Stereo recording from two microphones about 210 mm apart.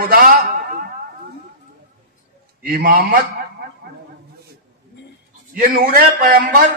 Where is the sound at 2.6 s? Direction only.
45° right (ahead or behind).